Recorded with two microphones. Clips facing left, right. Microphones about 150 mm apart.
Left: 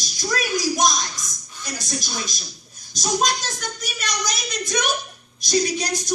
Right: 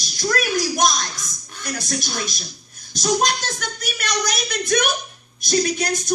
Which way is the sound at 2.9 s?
60° right (ahead or behind).